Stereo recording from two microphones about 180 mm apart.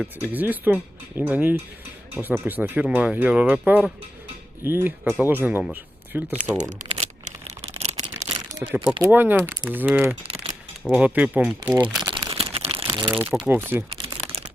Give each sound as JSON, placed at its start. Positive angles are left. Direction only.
{"t": 0.0, "sound": "speech", "side_deg": -10}
{"t": 6.6, "sound": "a sound", "side_deg": -40}
{"t": 8.7, "sound": "speech", "side_deg": -10}
{"t": 12.0, "sound": "crumpling", "side_deg": -25}
{"t": 13.4, "sound": "speech", "side_deg": -10}
{"t": 13.9, "sound": "crumpling", "side_deg": -30}